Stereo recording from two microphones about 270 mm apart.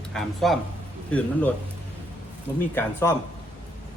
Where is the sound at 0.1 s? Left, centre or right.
Centre.